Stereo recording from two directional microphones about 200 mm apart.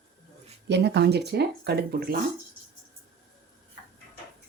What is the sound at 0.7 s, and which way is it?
Speech, 55° right (ahead or behind).